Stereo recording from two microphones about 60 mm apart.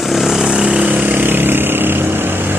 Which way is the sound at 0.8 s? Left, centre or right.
Right.